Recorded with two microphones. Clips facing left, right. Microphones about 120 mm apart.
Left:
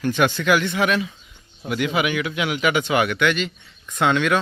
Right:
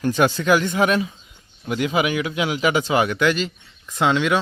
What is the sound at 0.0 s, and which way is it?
A man's voice, 35° right (ahead or behind).